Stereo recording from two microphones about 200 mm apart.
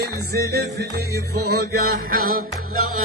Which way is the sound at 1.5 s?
50° right (ahead or behind).